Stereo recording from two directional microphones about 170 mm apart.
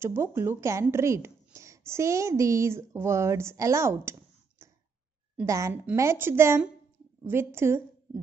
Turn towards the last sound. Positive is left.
turn(degrees=-15)  # may be behind; listen again after turning